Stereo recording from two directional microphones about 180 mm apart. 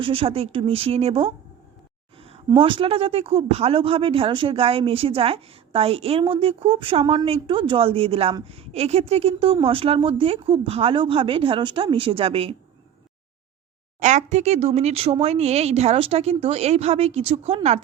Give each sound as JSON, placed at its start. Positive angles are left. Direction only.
{"t": 0.0, "sound": "a woman's voice", "side_deg": -30}
{"t": 14.0, "sound": "a woman's voice", "side_deg": -40}